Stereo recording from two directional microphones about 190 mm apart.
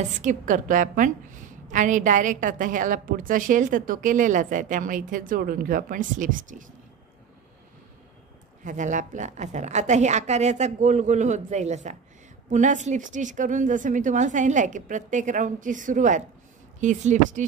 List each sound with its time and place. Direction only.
0.2 s a woman's voice: 40° right (ahead or behind)
8.6 s a woman's voice: 40° right (ahead or behind)